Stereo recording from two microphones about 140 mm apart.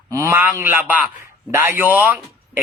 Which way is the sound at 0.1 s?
20° right (ahead or behind).